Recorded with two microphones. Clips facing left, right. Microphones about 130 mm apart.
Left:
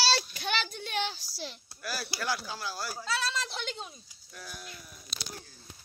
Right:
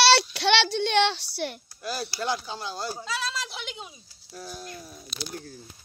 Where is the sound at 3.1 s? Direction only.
Centre (ahead or behind).